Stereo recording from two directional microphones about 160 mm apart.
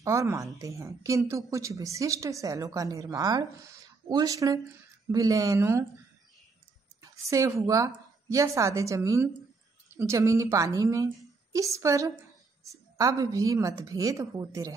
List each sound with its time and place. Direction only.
0.0 s a woman's voice: 20° right (ahead or behind)
7.0 s a woman's voice: 20° right (ahead or behind)